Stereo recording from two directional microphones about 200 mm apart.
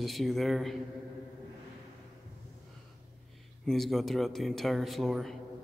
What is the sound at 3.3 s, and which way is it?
Speech, centre (ahead or behind).